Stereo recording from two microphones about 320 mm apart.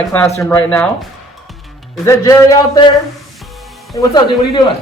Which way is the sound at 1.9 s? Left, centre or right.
Centre.